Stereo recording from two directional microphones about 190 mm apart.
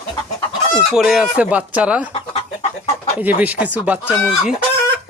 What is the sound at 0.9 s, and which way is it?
Speech, 5° right (ahead or behind).